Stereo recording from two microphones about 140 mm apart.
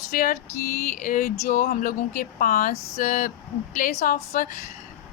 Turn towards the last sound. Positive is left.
turn(degrees=80)